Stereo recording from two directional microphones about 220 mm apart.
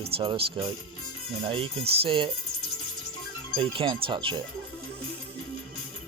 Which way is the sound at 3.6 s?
20° right (ahead or behind).